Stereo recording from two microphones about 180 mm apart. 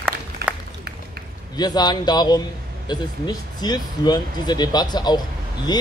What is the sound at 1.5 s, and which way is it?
Speech, 20° left (ahead or behind).